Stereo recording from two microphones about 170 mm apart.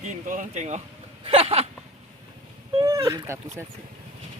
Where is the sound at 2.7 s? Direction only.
20° right (ahead or behind).